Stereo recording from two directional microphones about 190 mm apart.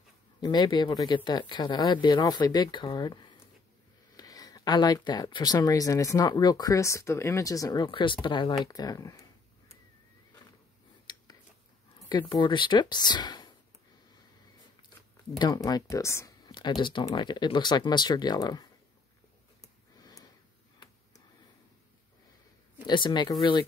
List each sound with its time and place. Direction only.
0.4 s speech: 20° left (ahead or behind)
11.1 s a sound: 20° left (ahead or behind)
12.0 s speech: 25° left (ahead or behind)
15.3 s speech: 20° left (ahead or behind)
20.0 s a sound: 20° left (ahead or behind)
22.8 s speech: 25° left (ahead or behind)